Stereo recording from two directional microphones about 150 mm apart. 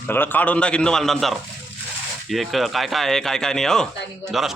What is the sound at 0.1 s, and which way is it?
A man's voice, 15° left (ahead or behind).